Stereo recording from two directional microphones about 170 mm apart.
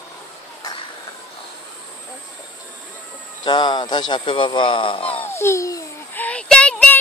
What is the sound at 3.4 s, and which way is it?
Speech, 25° left (ahead or behind).